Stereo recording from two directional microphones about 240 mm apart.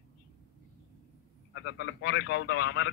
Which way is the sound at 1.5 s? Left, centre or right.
Left.